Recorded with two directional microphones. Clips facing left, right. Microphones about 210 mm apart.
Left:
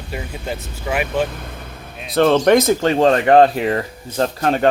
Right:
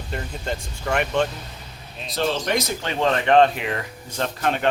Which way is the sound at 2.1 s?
55° left (ahead or behind).